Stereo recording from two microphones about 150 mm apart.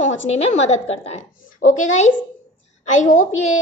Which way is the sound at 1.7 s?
55° left (ahead or behind).